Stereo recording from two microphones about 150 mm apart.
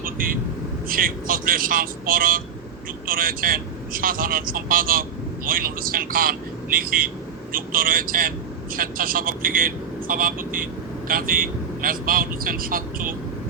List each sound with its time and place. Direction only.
0.0 s vehicle: 70° right (ahead or behind)
0.9 s speech: 70° right (ahead or behind)